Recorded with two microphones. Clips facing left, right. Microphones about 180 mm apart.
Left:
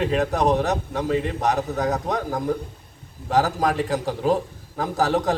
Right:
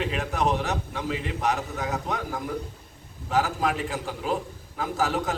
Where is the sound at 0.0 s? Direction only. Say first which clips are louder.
Left 6 dB; 40° left (ahead or behind).